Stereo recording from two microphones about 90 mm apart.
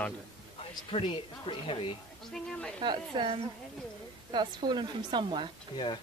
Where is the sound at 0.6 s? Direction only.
90° left.